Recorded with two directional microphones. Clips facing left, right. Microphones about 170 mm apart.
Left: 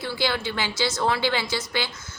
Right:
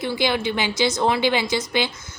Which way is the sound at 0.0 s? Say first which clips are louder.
Right 4 dB; 20° right (ahead or behind).